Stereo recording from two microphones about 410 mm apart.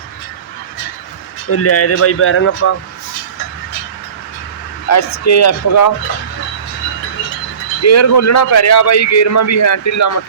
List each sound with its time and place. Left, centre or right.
1.5 s a man's voice: left
4.9 s a man's voice: left
7.8 s a man's voice: left